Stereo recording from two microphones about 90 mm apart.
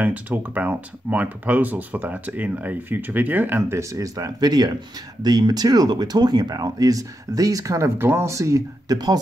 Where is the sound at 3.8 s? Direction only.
35° right (ahead or behind).